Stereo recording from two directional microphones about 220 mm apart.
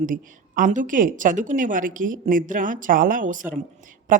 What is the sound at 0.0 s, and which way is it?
Speech, 35° right (ahead or behind).